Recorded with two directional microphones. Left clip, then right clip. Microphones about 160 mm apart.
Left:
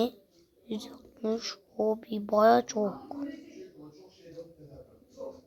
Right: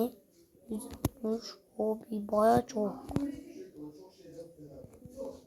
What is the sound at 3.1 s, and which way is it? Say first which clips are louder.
Speech: right 3 dB; 30° left (ahead or behind).